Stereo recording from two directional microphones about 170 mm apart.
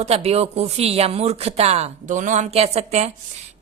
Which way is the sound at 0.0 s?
35° right (ahead or behind).